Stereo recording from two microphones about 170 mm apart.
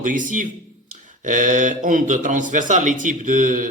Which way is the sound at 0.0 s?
50° right (ahead or behind).